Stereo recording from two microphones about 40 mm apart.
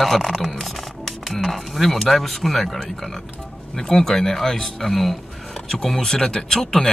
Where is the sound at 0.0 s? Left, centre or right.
Centre.